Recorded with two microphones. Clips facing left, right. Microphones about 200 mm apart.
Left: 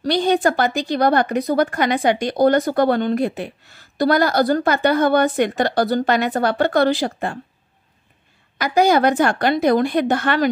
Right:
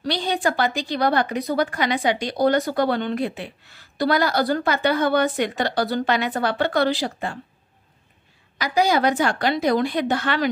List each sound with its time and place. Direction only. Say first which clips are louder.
0.0 s speech: left 6 dB; 50° left (ahead or behind)
8.5 s speech: left 4 dB; 55° left (ahead or behind)